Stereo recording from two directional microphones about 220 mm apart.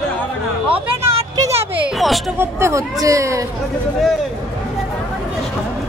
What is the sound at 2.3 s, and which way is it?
Speech, 15° right (ahead or behind).